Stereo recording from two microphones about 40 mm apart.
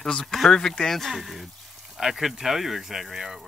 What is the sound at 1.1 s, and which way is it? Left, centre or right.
Speech, centre.